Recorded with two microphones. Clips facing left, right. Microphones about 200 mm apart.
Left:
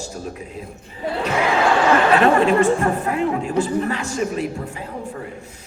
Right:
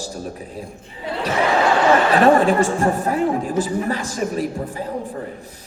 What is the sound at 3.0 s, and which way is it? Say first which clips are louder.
A man's voice: right 1 dB; 35° right (ahead or behind).